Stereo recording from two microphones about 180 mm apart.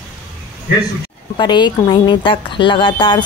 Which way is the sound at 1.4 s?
25° left (ahead or behind).